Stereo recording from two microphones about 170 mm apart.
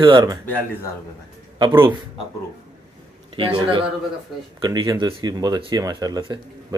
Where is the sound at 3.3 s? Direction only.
30° right (ahead or behind).